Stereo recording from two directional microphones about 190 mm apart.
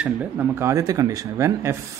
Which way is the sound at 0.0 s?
10° right (ahead or behind).